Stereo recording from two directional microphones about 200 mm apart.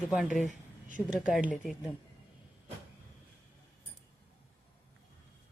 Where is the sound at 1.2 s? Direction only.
Centre (ahead or behind).